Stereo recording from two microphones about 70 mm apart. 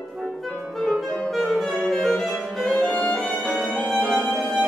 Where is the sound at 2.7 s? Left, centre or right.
Centre.